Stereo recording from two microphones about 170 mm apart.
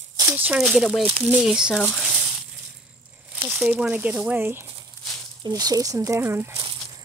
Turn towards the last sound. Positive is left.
turn(degrees=-15)  # may be behind; listen again after turning